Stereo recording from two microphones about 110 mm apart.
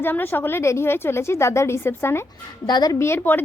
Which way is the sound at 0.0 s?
20° left (ahead or behind).